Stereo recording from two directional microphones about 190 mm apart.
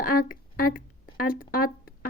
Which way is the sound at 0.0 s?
45° left (ahead or behind).